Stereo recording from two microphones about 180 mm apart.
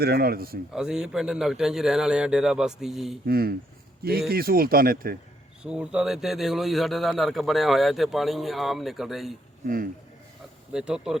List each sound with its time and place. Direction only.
0.0 s speech: 60° right (ahead or behind)
0.7 s a man's voice: 5° right (ahead or behind)
3.2 s speech: 55° right (ahead or behind)
5.6 s a man's voice: 5° right (ahead or behind)
9.6 s speech: 50° right (ahead or behind)
10.7 s a man's voice: 5° right (ahead or behind)